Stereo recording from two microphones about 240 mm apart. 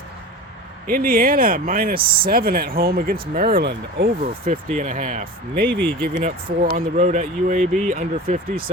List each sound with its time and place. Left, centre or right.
0.9 s speech: right